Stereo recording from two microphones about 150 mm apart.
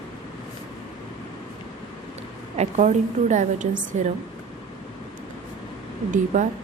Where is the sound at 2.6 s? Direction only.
50° right (ahead or behind).